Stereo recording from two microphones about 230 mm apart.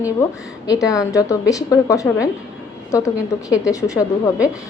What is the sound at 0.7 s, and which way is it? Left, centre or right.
A woman's voice, centre.